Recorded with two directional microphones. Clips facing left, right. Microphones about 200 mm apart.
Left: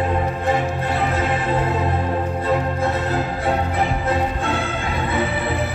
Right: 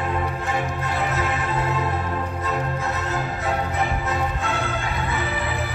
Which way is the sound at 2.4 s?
30° left (ahead or behind).